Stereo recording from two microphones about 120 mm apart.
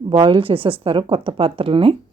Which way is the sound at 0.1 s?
45° right (ahead or behind).